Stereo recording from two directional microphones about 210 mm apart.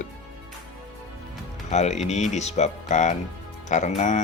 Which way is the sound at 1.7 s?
30° left (ahead or behind).